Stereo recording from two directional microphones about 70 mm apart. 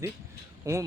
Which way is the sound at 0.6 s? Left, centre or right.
Right.